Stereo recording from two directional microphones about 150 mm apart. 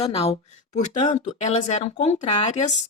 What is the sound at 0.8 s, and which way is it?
Speech, 55° left (ahead or behind).